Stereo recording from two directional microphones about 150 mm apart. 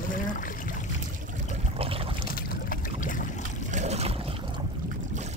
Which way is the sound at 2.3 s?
70° left (ahead or behind).